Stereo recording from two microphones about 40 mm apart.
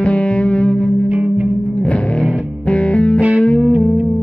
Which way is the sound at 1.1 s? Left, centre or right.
Right.